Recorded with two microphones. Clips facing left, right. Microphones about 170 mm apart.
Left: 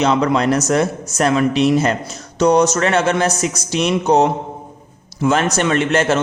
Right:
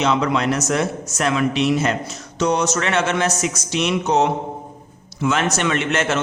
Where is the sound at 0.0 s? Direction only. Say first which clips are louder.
Left 4 dB; 40° left (ahead or behind).